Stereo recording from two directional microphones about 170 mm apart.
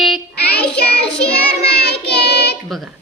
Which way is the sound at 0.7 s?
70° left (ahead or behind).